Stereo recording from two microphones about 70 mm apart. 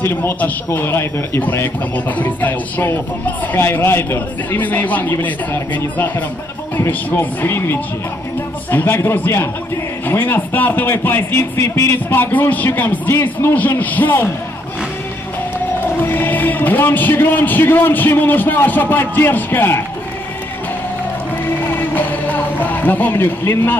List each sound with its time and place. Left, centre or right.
0.0 s a man's voice: left
1.4 s a man's voice: left
11.6 s speech: left
12.1 s speech: left
16.0 s speech: left
21.5 s music: left